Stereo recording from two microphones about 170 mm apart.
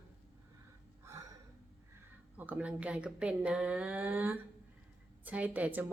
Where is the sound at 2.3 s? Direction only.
10° right (ahead or behind).